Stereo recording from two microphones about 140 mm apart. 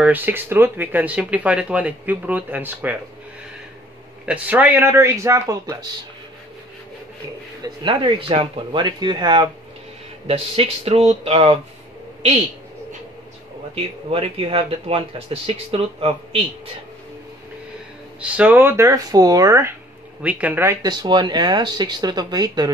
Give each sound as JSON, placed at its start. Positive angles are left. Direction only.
{"t": 0.0, "sound": "speech", "side_deg": -15}
{"t": 4.3, "sound": "speech", "side_deg": -10}
{"t": 7.6, "sound": "speech", "side_deg": -35}
{"t": 13.7, "sound": "speech", "side_deg": -45}
{"t": 18.2, "sound": "speech", "side_deg": -10}
{"t": 20.2, "sound": "speech", "side_deg": -10}
{"t": 20.8, "sound": "speech", "side_deg": -30}